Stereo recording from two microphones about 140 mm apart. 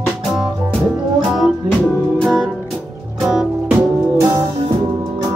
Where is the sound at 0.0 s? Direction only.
5° right (ahead or behind).